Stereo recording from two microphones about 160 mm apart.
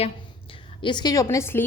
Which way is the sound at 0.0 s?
35° left (ahead or behind).